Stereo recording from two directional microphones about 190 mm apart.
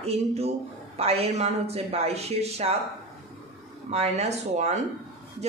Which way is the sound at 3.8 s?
35° right (ahead or behind).